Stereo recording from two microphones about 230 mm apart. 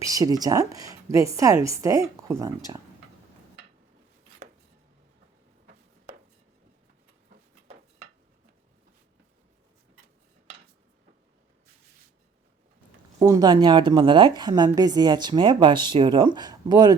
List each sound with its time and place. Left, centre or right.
0.0 s a woman's voice: centre
13.1 s a woman's voice: centre